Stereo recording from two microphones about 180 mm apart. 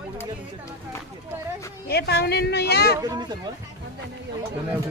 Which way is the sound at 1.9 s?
60° left (ahead or behind).